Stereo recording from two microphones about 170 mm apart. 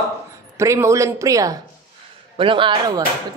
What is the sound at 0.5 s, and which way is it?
Speech, 15° right (ahead or behind).